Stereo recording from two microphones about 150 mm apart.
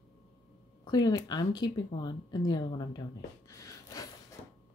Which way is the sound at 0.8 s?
25° left (ahead or behind).